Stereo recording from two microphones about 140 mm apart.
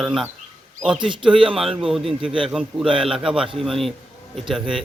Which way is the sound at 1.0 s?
35° right (ahead or behind).